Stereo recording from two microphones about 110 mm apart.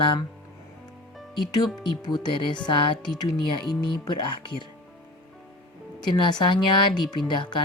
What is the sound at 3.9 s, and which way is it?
Speech, 45° left (ahead or behind).